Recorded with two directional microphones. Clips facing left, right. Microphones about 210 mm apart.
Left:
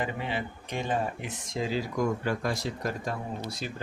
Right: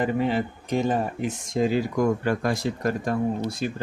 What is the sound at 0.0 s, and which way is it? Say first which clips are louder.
Speech: right 9 dB; 45° right (ahead or behind).